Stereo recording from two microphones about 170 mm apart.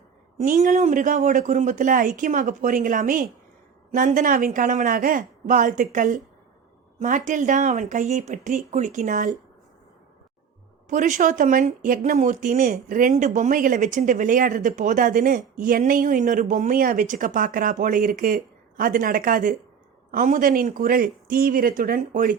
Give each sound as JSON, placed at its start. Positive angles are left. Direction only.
{"t": 0.3, "sound": "speech", "side_deg": -45}
{"t": 10.8, "sound": "speech", "side_deg": -45}